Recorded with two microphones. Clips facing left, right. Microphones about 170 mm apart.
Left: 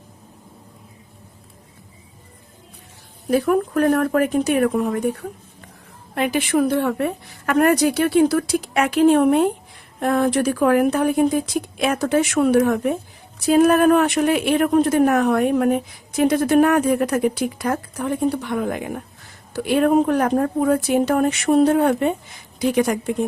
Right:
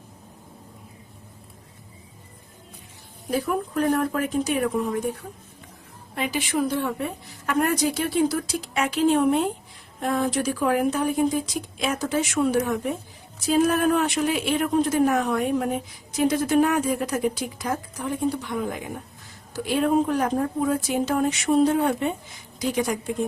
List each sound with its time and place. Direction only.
3.2 s a woman's voice: 65° left (ahead or behind)